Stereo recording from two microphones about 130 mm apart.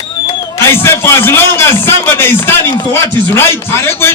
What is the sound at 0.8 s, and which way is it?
Speech, 20° left (ahead or behind).